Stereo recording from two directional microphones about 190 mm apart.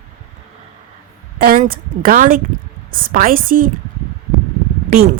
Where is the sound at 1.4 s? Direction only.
50° right (ahead or behind).